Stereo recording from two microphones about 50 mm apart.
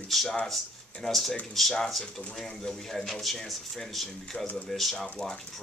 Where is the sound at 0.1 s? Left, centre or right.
Centre.